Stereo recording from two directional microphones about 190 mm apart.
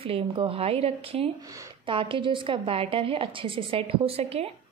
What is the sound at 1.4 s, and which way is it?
A woman's voice, 20° right (ahead or behind).